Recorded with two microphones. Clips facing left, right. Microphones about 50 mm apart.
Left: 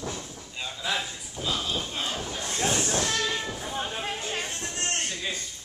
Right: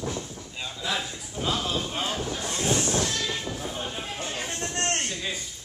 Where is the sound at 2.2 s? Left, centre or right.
Centre.